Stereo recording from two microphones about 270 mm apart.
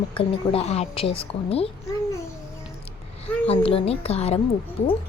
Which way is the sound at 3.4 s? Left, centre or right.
Left.